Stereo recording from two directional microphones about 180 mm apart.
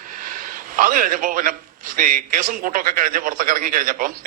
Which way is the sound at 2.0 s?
50° right (ahead or behind).